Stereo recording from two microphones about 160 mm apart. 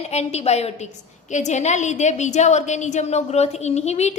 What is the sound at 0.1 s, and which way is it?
A woman's voice, 40° left (ahead or behind).